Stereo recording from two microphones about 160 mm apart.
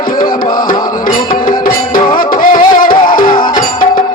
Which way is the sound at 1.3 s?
60° left (ahead or behind).